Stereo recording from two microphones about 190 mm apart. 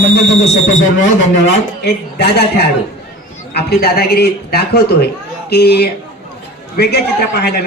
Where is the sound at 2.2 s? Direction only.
60° left (ahead or behind).